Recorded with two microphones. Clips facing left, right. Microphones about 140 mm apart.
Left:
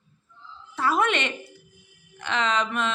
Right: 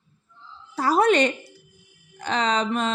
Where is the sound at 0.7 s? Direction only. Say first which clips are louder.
Right 5 dB; 35° right (ahead or behind).